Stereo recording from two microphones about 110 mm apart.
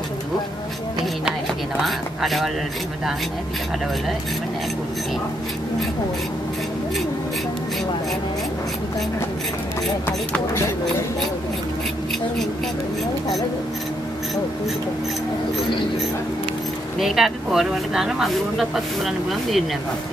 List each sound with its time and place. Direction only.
1.9 s a sound: centre (ahead or behind)
10.0 s speech: 20° left (ahead or behind)
17.0 s speech: 5° right (ahead or behind)